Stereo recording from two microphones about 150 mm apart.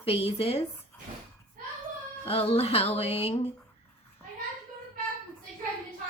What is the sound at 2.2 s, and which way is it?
Music, 40° left (ahead or behind).